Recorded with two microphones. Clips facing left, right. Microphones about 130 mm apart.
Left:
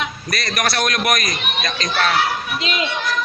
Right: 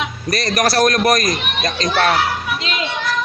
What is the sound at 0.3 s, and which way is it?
A man's voice, 40° right (ahead or behind).